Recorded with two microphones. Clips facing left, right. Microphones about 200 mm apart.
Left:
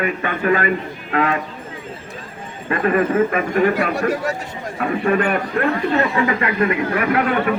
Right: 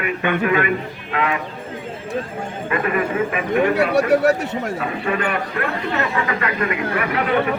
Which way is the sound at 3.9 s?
70° right (ahead or behind).